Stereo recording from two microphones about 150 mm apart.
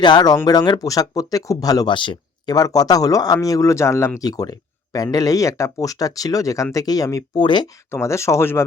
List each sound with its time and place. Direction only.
0.0 s speech: 30° left (ahead or behind)
7.9 s speech: 20° left (ahead or behind)